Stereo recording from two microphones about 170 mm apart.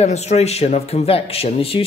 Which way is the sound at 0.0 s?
40° left (ahead or behind).